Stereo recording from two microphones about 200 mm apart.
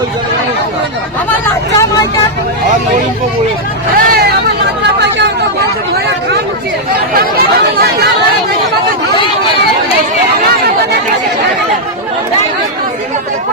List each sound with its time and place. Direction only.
3.9 s vehicle: 50° right (ahead or behind)
7.1 s speech: 50° right (ahead or behind)